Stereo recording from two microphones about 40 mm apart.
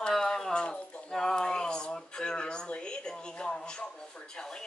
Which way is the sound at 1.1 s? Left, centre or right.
Centre.